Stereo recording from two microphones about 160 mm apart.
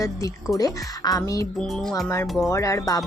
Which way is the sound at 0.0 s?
20° left (ahead or behind).